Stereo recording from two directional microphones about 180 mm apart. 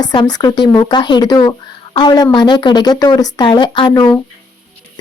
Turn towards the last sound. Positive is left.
turn(degrees=20)  # may be behind; listen again after turning